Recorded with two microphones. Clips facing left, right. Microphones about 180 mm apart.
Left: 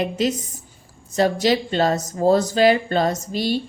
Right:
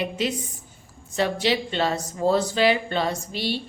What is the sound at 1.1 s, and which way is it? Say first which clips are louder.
Speech: left 5 dB; 40° left (ahead or behind).